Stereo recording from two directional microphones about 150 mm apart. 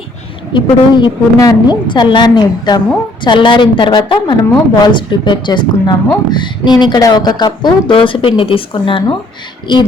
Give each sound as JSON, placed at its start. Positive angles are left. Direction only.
{"t": 0.5, "sound": "a woman's voice", "side_deg": 30}